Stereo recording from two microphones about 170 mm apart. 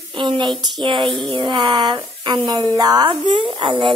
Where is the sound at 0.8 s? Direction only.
30° right (ahead or behind).